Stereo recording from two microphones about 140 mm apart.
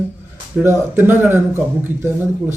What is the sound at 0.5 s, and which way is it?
Speech, 15° right (ahead or behind).